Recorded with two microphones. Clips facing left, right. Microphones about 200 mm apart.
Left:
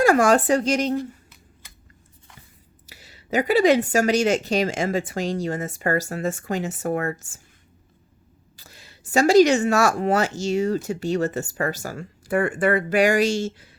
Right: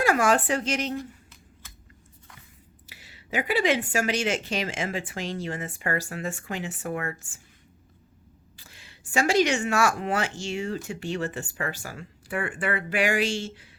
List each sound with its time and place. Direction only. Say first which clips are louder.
0.0 s a woman's voice: left 6 dB; 40° left (ahead or behind)
2.8 s a woman's voice: left 5 dB; 40° left (ahead or behind)
8.5 s a woman's voice: left 5 dB; 40° left (ahead or behind)